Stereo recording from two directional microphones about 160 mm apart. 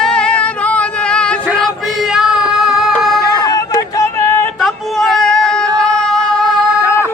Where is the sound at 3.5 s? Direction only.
20° left (ahead or behind).